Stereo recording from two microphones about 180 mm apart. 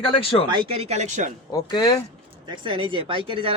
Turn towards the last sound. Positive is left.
turn(degrees=-30)  # may be behind; listen again after turning